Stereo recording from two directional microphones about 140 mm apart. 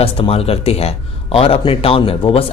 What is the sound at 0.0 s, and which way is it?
A man's voice, 45° left (ahead or behind).